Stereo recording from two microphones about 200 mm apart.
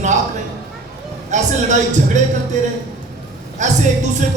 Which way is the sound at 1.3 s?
35° right (ahead or behind).